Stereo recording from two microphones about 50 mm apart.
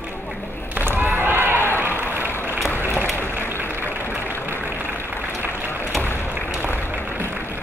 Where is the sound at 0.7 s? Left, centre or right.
Right.